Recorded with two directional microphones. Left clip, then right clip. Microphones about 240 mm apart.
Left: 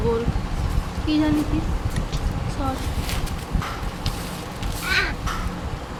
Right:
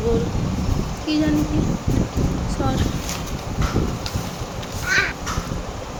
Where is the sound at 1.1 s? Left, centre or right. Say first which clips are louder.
Even; centre.